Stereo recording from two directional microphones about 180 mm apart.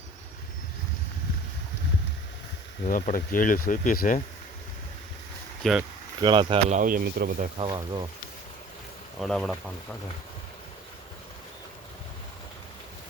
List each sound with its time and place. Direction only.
2.8 s speech: 50° left (ahead or behind)
5.6 s speech: centre (ahead or behind)
6.2 s speech: 25° right (ahead or behind)
6.7 s speech: 50° right (ahead or behind)
7.6 s speech: 30° right (ahead or behind)
9.1 s speech: centre (ahead or behind)